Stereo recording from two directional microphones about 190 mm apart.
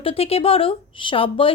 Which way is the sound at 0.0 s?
30° left (ahead or behind).